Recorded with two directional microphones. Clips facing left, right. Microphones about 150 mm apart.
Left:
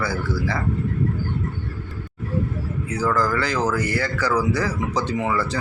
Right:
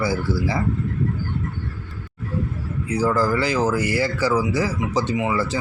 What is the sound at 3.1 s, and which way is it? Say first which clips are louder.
Speech: even; 30° right (ahead or behind).